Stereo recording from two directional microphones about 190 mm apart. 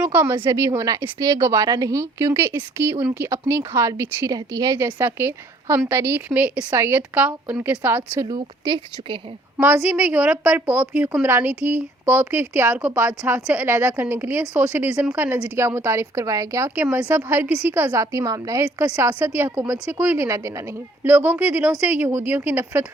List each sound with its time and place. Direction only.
0.0 s a woman's voice: 10° right (ahead or behind)
9.9 s a woman's voice: 5° right (ahead or behind)